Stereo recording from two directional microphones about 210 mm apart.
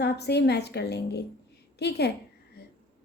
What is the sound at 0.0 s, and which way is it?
A woman's voice, 50° left (ahead or behind).